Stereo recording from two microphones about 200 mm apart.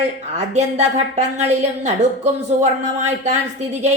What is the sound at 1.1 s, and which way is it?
A woman's voice, 35° right (ahead or behind).